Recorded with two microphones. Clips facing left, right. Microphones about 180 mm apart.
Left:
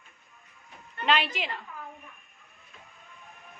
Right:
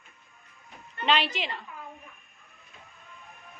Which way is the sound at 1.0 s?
5° left (ahead or behind).